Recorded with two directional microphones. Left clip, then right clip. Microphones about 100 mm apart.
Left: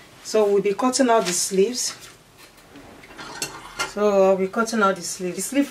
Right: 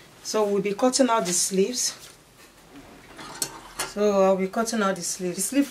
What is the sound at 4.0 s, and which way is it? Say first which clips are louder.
Speech: left 3 dB; 20° right (ahead or behind).